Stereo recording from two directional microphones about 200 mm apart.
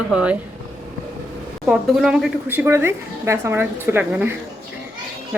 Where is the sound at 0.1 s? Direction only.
5° right (ahead or behind).